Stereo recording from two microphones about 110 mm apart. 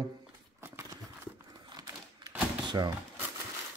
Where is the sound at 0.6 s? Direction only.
25° right (ahead or behind).